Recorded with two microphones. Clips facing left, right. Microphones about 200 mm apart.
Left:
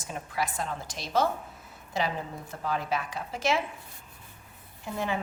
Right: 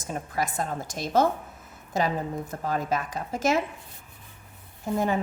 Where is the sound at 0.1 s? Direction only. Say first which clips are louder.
Right 3 dB; 45° right (ahead or behind).